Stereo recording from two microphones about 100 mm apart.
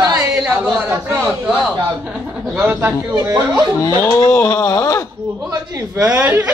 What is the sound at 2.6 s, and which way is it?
Speech, 20° right (ahead or behind).